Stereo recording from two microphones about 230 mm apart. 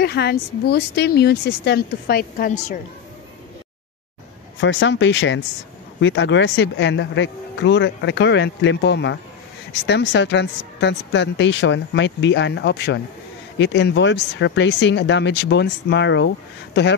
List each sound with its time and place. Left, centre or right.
0.0 s speech: left
4.6 s speech: left